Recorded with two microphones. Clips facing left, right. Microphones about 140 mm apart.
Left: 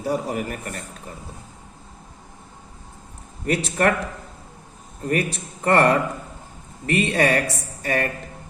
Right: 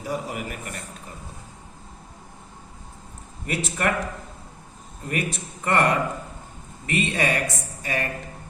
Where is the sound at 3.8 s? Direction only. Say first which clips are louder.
Left 5 dB; 45° left (ahead or behind).